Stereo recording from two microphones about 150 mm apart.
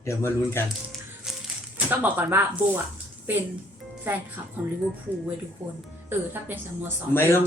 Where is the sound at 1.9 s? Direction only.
15° right (ahead or behind).